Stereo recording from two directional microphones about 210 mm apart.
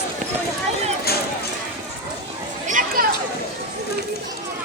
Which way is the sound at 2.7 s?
40° right (ahead or behind).